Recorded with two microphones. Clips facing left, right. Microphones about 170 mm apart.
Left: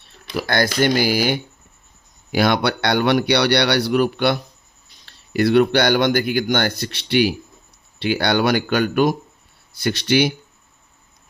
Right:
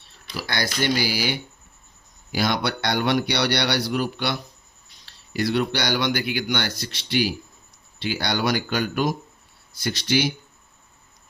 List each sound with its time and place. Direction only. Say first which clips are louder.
0.3 s speech: left 8 dB; 50° left (ahead or behind)
2.3 s speech: left 6 dB; 60° left (ahead or behind)